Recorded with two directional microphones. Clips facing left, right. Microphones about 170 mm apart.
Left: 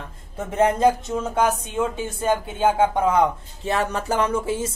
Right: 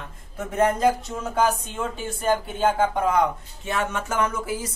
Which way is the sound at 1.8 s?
20° left (ahead or behind).